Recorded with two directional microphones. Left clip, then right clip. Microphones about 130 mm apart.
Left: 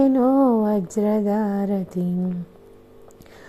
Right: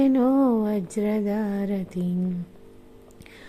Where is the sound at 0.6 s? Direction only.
15° right (ahead or behind).